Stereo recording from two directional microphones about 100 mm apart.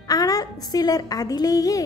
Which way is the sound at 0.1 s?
40° left (ahead or behind).